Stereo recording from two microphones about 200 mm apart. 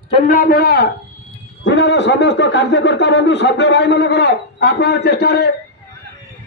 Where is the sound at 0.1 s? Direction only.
40° left (ahead or behind).